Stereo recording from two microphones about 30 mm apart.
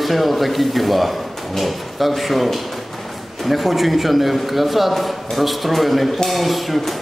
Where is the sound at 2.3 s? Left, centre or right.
Centre.